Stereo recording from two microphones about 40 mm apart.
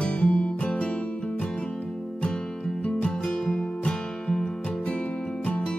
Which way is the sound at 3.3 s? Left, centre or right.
Centre.